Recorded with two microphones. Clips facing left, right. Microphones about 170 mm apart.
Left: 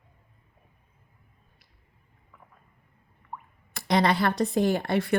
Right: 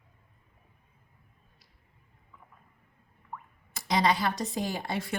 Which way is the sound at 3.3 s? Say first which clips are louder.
Left 2 dB; 15° left (ahead or behind).